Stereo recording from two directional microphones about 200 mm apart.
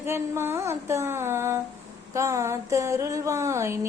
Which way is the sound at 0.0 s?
10° right (ahead or behind).